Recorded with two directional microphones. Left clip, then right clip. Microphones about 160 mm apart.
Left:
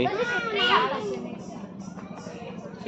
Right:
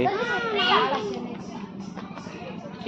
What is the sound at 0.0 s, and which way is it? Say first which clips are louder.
Children playing: right 1 dB; centre (ahead or behind).